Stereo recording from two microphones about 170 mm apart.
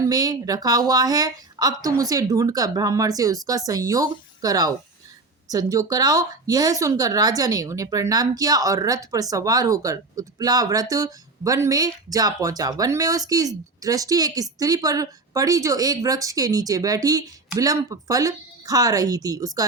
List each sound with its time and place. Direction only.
0.0 s speech: 20° right (ahead or behind)